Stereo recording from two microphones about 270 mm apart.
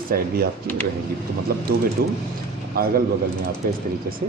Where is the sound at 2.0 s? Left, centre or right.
Right.